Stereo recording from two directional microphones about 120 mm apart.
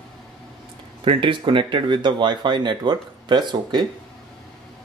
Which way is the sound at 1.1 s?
45° right (ahead or behind).